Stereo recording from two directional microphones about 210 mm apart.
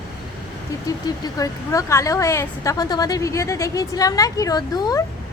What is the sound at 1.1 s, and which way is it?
A woman's voice, 15° left (ahead or behind).